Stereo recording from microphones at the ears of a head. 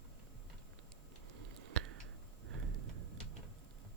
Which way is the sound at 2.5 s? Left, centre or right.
Right.